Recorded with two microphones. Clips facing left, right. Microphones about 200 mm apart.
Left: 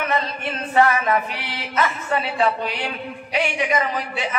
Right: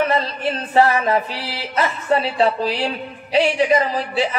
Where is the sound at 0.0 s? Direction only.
30° right (ahead or behind).